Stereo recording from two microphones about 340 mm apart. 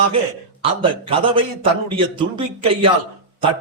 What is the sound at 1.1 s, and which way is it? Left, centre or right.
A man's voice, centre.